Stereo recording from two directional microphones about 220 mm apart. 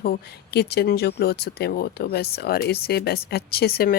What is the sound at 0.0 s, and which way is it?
Speech, 45° left (ahead or behind).